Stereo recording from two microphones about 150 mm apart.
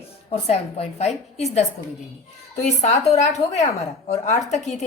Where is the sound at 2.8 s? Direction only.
50° left (ahead or behind).